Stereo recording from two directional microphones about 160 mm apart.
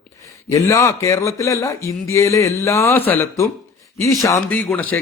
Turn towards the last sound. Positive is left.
turn(degrees=10)  # may be behind; listen again after turning